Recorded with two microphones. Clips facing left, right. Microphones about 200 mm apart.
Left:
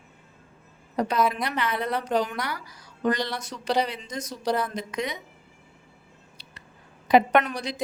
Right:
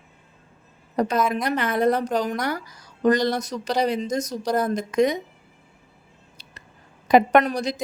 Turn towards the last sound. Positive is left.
turn(degrees=-40)  # may be behind; listen again after turning